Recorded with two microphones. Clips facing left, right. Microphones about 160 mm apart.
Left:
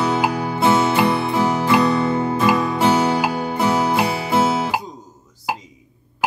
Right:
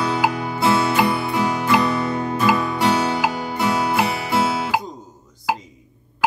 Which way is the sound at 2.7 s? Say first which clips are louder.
Left 3 dB; 20° left (ahead or behind).